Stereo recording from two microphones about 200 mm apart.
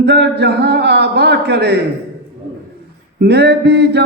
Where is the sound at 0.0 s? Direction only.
55° right (ahead or behind).